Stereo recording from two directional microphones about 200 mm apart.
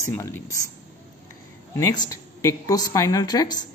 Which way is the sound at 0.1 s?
10° left (ahead or behind).